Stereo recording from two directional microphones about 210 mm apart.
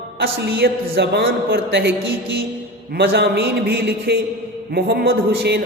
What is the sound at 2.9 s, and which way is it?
A man's voice, 50° right (ahead or behind).